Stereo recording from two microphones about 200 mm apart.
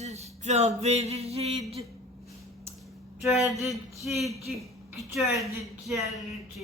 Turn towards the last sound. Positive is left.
turn(degrees=0)  # may be behind; listen again after turning